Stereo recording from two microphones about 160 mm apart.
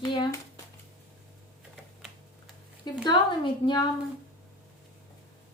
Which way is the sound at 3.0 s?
30° left (ahead or behind).